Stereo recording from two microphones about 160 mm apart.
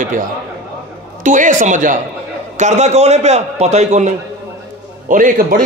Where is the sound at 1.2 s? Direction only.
55° right (ahead or behind).